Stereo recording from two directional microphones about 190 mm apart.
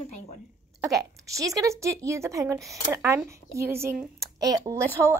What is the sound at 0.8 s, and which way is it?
Speech, 15° right (ahead or behind).